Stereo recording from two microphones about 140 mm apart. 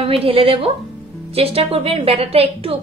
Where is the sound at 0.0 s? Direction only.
40° right (ahead or behind).